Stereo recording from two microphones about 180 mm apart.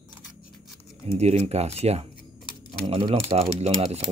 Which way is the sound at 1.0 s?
35° right (ahead or behind).